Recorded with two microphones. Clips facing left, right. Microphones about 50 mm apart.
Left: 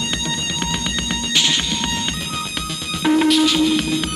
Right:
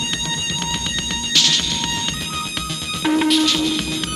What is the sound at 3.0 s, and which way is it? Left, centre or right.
Music, centre.